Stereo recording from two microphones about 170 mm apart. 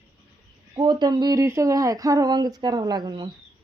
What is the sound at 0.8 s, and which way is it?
Speech, 25° right (ahead or behind).